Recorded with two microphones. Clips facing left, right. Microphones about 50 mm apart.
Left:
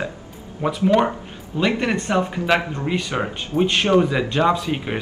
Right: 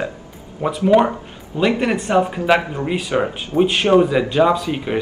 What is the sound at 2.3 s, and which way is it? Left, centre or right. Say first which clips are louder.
Speech: right 3 dB; centre.